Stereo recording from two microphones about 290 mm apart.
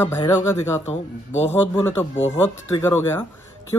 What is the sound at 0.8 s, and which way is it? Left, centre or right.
Speech, left.